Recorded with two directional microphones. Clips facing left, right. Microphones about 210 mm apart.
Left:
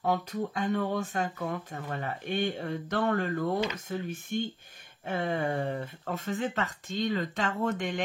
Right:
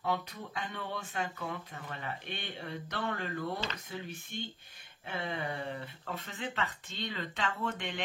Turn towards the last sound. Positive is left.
turn(degrees=45)  # may be behind; listen again after turning